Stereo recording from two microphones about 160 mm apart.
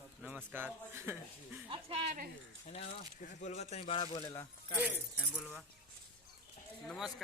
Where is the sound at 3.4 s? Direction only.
45° left (ahead or behind).